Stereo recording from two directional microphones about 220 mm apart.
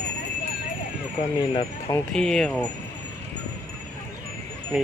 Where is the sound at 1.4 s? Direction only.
20° left (ahead or behind).